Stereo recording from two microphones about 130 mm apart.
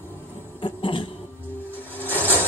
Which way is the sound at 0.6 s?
40° left (ahead or behind).